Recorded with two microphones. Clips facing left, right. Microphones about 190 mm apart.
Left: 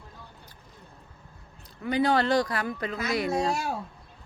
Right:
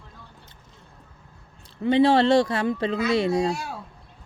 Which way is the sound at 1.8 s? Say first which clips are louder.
Right 6 dB; 25° right (ahead or behind).